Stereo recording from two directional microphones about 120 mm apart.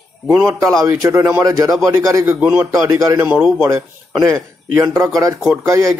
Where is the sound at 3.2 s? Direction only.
10° right (ahead or behind).